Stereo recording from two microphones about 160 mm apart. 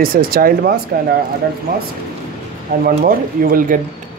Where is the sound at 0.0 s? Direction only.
65° right (ahead or behind).